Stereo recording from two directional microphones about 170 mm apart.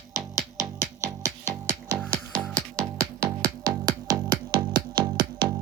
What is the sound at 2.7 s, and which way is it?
Music, 20° right (ahead or behind).